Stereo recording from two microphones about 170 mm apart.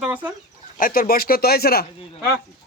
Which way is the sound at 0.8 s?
55° left (ahead or behind).